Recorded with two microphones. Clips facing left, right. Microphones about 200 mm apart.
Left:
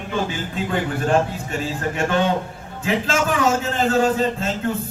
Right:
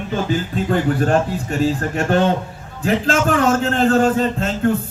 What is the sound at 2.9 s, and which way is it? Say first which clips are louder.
A man's voice: right 4 dB; 50° right (ahead or behind).